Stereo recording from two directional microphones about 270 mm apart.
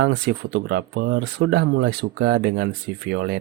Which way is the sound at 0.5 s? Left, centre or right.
Right.